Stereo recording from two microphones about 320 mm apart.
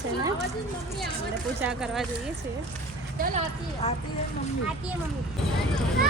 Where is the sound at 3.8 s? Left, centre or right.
Left.